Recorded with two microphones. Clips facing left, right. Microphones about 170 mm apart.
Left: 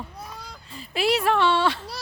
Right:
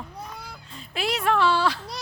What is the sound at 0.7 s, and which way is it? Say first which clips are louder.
Speech: left 5 dB; 5° left (ahead or behind).